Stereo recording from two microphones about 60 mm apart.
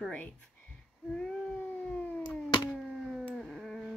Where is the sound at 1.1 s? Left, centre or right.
Centre.